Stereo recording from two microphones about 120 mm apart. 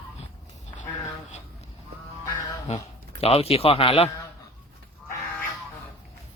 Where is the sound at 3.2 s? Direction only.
55° left (ahead or behind).